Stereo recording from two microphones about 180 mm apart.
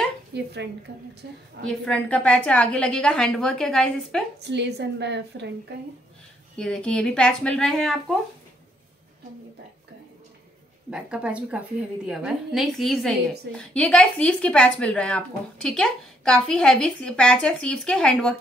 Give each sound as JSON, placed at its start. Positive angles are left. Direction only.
{"t": 0.3, "sound": "a woman's voice", "side_deg": -70}
{"t": 1.6, "sound": "a woman's voice", "side_deg": 5}
{"t": 4.4, "sound": "a woman's voice", "side_deg": -70}
{"t": 6.5, "sound": "a woman's voice", "side_deg": 5}
{"t": 10.9, "sound": "a woman's voice", "side_deg": -5}